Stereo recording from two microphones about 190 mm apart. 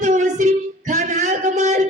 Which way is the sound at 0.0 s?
40° right (ahead or behind).